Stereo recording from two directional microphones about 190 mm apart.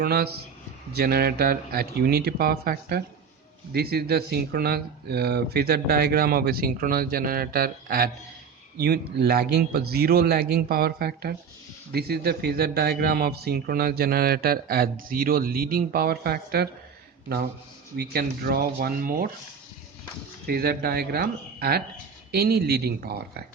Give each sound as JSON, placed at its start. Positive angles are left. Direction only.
{"t": 0.0, "sound": "speech", "side_deg": -55}
{"t": 20.5, "sound": "speech", "side_deg": -55}